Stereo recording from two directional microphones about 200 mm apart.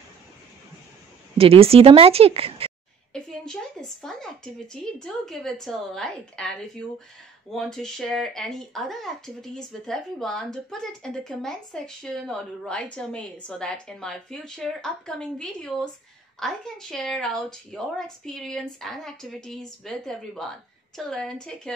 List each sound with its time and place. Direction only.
1.4 s speech: 30° right (ahead or behind)
3.1 s speech: 5° left (ahead or behind)
7.5 s speech: centre (ahead or behind)